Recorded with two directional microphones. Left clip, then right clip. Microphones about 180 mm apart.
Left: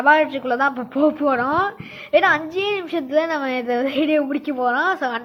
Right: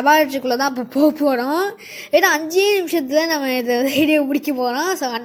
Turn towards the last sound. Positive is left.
turn(degrees=-30)  # may be behind; listen again after turning